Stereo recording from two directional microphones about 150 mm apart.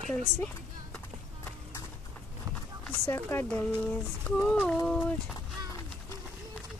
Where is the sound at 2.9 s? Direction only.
15° left (ahead or behind).